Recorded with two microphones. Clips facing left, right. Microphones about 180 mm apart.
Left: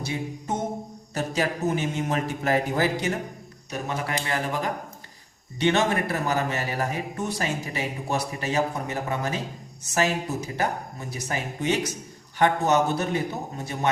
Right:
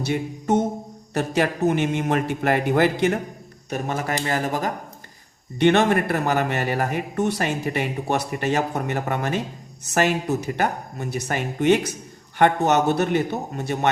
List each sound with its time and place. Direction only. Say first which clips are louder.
0.0 s music: right 6 dB; 70° right (ahead or behind)
1.1 s speech: right 4 dB; 65° right (ahead or behind)
3.7 s a man's voice: right 4 dB; 50° right (ahead or behind)
5.5 s speech: right 5 dB; 60° right (ahead or behind)